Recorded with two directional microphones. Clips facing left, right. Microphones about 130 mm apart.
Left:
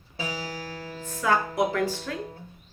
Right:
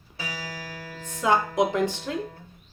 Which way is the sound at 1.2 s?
20° right (ahead or behind).